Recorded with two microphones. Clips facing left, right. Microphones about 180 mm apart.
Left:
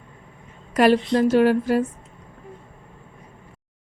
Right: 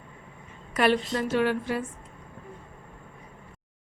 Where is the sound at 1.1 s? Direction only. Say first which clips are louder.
Left 8 dB; 40° left (ahead or behind).